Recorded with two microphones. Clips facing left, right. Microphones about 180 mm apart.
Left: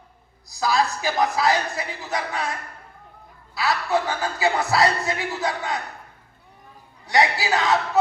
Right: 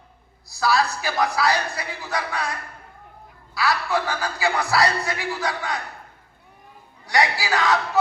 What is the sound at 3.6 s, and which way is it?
Speech, 20° left (ahead or behind).